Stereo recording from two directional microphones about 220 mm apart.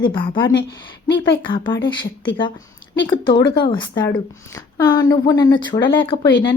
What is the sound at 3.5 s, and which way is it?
Speech, 25° left (ahead or behind).